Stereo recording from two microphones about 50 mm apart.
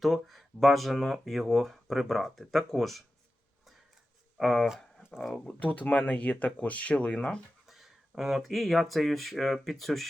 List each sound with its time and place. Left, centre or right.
0.0 s speech: centre
4.4 s speech: centre
5.5 s speech: left
7.7 s speech: centre